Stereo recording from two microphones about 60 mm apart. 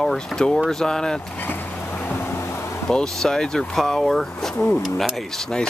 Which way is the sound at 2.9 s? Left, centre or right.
Centre.